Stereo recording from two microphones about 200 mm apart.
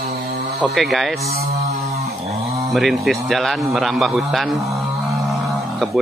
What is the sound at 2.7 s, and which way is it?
Speech, centre (ahead or behind).